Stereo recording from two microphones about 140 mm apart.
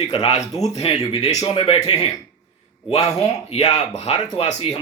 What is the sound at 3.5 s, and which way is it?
Speech, 55° left (ahead or behind).